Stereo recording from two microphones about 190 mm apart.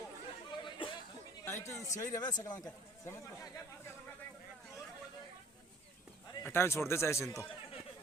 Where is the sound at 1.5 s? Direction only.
15° left (ahead or behind).